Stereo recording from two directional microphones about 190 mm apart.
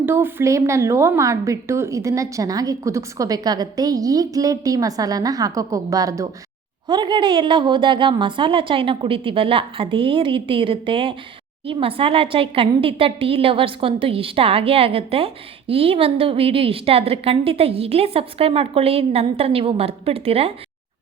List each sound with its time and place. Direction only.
0.0 s a woman's voice: 10° right (ahead or behind); by 20.5 s 30° right (ahead or behind)